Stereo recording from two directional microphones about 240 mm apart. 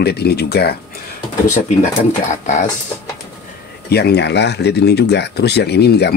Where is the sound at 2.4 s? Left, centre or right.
Left.